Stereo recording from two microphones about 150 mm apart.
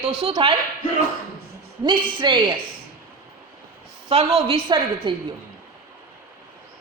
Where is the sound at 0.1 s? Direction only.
40° right (ahead or behind).